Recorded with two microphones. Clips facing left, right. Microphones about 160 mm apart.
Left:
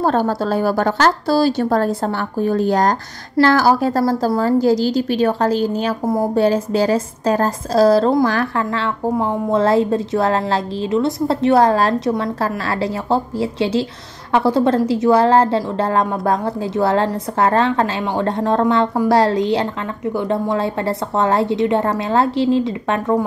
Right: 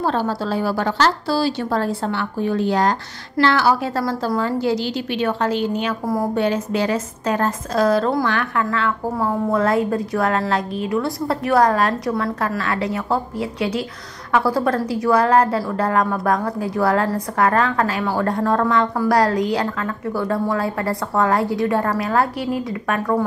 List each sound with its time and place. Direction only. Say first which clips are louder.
0.0 s a woman's voice: left 4 dB; 45° left (ahead or behind); by 23.2 s 25° left (ahead or behind)